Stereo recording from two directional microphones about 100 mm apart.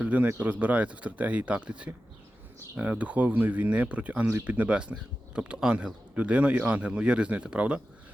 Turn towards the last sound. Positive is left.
turn(degrees=-10)  # may be behind; listen again after turning